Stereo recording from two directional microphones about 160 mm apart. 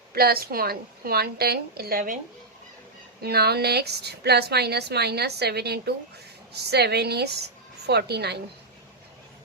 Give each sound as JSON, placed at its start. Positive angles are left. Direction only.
{"t": 0.1, "sound": "a woman's voice", "side_deg": -75}
{"t": 3.2, "sound": "a woman's voice", "side_deg": -80}